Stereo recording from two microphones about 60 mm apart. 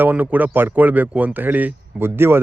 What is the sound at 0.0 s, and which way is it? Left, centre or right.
Speech, right.